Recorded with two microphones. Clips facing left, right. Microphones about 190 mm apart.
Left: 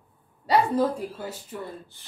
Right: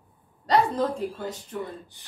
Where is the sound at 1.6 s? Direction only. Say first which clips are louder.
Right 2 dB; 15° right (ahead or behind).